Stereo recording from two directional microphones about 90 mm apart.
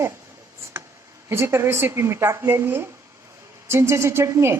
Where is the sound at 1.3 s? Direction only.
30° right (ahead or behind).